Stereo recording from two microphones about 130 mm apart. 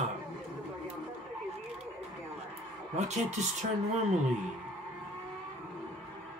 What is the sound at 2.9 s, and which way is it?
Speech, 60° right (ahead or behind).